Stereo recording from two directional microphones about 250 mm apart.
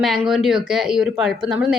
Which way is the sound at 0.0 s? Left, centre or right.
Centre.